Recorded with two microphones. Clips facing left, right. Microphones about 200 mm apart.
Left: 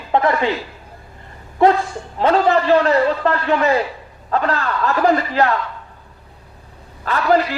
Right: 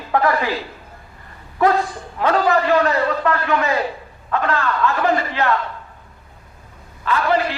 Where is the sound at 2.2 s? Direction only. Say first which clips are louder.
Left 2 dB; 30° left (ahead or behind).